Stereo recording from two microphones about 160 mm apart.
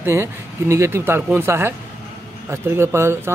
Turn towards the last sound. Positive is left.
turn(degrees=-15)  # may be behind; listen again after turning